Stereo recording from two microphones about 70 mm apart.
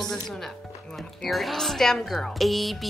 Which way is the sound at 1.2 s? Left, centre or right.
Centre.